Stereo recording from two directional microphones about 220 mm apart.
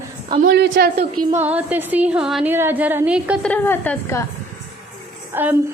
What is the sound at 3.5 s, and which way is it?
Speech, 10° left (ahead or behind).